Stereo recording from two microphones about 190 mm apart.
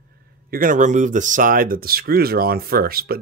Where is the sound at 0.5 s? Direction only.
45° right (ahead or behind).